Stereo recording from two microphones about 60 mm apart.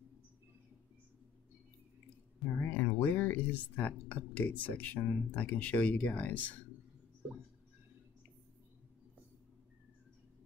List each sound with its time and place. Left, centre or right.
2.4 s speech: left